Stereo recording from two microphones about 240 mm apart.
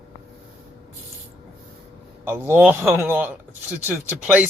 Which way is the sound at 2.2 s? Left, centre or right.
Centre.